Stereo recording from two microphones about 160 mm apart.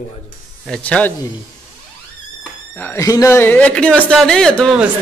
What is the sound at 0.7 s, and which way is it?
Speech, 5° left (ahead or behind).